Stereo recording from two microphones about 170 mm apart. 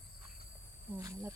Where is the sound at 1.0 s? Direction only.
20° right (ahead or behind).